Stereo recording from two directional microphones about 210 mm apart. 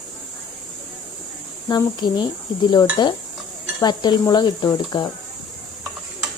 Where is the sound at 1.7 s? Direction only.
20° left (ahead or behind).